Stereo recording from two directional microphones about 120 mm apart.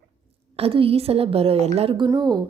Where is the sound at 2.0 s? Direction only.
35° right (ahead or behind).